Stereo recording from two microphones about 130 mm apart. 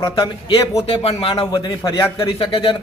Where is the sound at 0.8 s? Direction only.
50° left (ahead or behind).